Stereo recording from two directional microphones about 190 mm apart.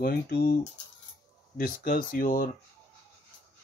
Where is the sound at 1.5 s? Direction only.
45° left (ahead or behind).